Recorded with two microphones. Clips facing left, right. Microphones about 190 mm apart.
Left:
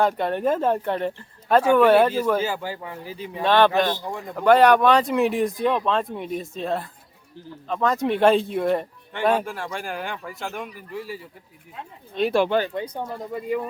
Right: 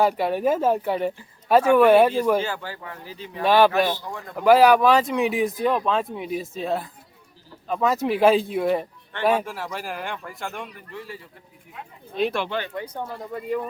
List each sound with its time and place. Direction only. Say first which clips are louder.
0.0 s speech: right 1 dB; 5° right (ahead or behind)
2.4 s speech: left 3 dB; 10° left (ahead or behind)
3.4 s speech: right 1 dB; 10° right (ahead or behind); by 11.2 s 10° left (ahead or behind)
12.3 s speech: left 7 dB; 40° left (ahead or behind)
13.1 s speech: left 1 dB; 5° left (ahead or behind)